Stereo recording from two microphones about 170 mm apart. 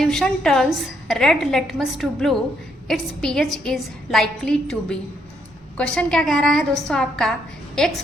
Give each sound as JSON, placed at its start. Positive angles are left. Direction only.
{"t": 0.0, "sound": "a woman's voice", "side_deg": 0}